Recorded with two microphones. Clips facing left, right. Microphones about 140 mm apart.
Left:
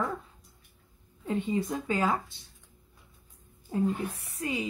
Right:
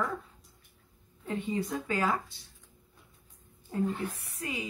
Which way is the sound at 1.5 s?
25° left (ahead or behind).